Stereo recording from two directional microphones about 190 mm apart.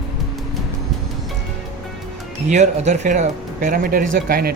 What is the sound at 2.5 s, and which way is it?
Speech, 35° right (ahead or behind).